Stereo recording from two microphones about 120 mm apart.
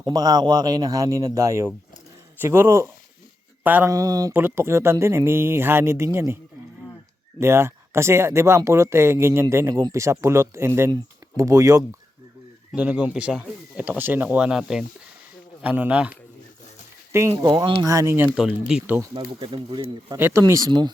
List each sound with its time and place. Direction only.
0.0 s speech: 35° right (ahead or behind); by 3.8 s 15° right (ahead or behind)
3.8 s speech: 30° right (ahead or behind)
4.4 s speech: 20° right (ahead or behind)
12.7 s speech: 10° right (ahead or behind)
17.1 s speech: 20° right (ahead or behind)
17.3 s speech: 40° right (ahead or behind)
17.8 s speech: 25° right (ahead or behind)
18.7 s speech: 5° right (ahead or behind)
19.1 s speech: 45° right (ahead or behind)
20.1 s speech: 20° right (ahead or behind)
20.4 s speech: 30° right (ahead or behind)